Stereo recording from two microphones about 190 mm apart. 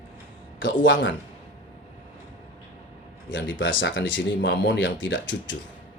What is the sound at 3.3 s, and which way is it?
Speech, 80° left.